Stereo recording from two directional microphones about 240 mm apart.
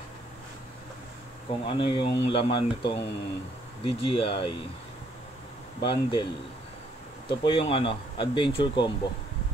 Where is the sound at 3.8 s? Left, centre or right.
Left.